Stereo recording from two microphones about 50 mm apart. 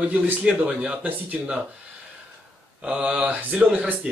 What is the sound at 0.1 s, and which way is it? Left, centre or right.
Speech, right.